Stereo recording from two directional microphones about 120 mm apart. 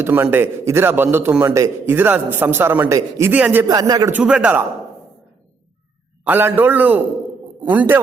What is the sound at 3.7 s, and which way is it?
Speech, 30° right (ahead or behind).